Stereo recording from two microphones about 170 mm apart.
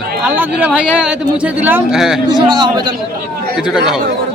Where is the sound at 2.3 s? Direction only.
25° right (ahead or behind).